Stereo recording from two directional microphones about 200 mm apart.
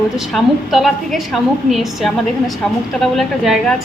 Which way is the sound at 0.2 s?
Centre (ahead or behind).